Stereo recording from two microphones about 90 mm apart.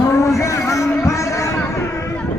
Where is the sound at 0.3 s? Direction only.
35° left (ahead or behind).